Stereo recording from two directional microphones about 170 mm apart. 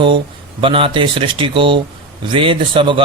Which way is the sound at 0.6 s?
30° right (ahead or behind).